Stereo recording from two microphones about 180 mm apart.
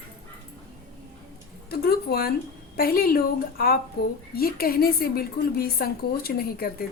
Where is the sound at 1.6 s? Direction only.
60° left (ahead or behind).